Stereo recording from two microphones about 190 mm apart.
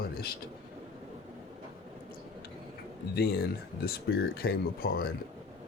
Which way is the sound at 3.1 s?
60° left (ahead or behind).